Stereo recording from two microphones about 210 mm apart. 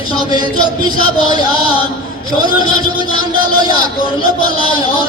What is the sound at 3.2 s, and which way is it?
Speech, 20° right (ahead or behind).